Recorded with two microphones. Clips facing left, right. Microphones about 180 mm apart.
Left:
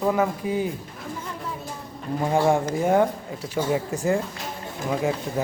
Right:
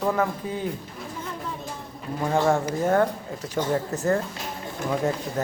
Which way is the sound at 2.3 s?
15° left (ahead or behind).